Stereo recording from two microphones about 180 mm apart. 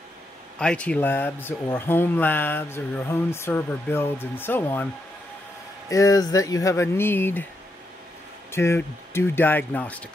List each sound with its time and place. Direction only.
0.6 s speech: 5° left (ahead or behind)
5.9 s speech: 20° left (ahead or behind)
8.5 s speech: 15° left (ahead or behind)